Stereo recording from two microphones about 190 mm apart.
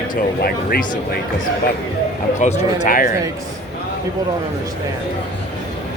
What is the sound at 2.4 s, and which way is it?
Speech, 40° left (ahead or behind).